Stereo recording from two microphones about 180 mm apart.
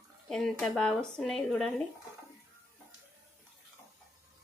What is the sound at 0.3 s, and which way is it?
A woman's voice, 5° left (ahead or behind).